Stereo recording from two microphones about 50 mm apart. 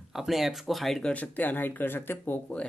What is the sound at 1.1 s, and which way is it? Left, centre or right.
Speech, left.